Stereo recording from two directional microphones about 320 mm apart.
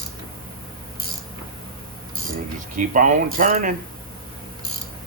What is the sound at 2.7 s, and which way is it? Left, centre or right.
Speech, right.